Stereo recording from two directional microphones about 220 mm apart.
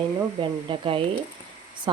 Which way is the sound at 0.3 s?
25° right (ahead or behind).